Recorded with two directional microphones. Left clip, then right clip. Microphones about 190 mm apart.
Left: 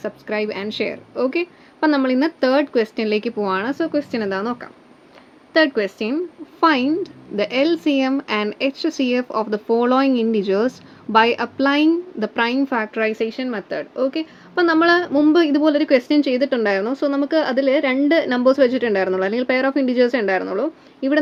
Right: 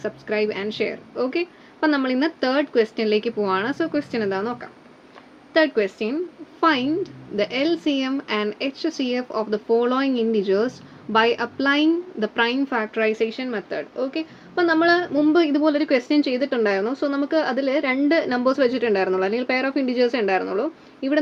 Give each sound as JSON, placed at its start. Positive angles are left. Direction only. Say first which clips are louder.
{"t": 0.0, "sound": "a woman's voice", "louder": "even", "side_deg": 30}